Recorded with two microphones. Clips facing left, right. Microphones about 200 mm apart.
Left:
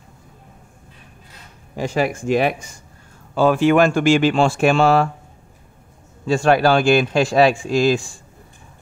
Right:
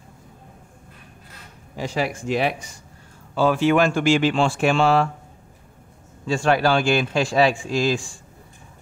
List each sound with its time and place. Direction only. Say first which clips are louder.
1.8 s speech: left 4 dB; 50° left (ahead or behind)
6.2 s speech: left 4 dB; 45° left (ahead or behind)